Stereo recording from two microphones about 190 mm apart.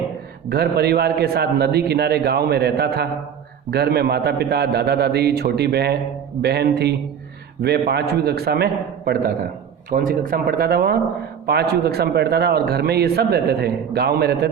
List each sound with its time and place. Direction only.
0.5 s a man's voice: 60° right (ahead or behind)